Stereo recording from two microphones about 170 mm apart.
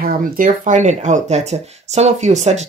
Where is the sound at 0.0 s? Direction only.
50° right (ahead or behind).